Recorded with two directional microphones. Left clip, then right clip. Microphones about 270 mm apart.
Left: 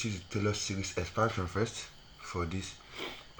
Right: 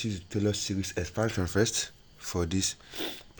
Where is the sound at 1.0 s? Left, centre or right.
Right.